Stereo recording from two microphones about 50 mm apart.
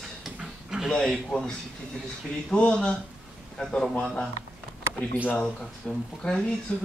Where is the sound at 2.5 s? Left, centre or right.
Centre.